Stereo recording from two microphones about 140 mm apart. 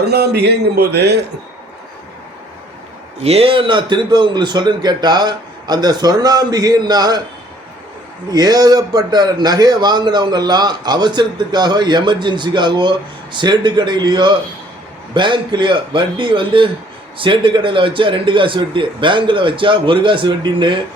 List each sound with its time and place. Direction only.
3.2 s a man's voice: 45° right (ahead or behind); by 7.2 s 30° right (ahead or behind)
8.3 s a man's voice: 30° right (ahead or behind)